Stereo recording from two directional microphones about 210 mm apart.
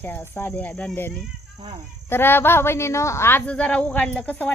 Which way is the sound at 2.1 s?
10° left (ahead or behind).